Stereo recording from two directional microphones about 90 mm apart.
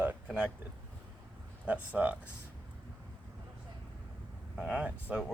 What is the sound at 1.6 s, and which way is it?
Speech, 15° right (ahead or behind).